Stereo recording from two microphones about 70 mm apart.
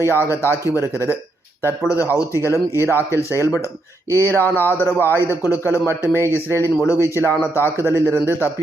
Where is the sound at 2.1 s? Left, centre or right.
Left.